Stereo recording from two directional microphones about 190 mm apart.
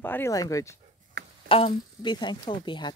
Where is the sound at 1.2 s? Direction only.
60° right (ahead or behind).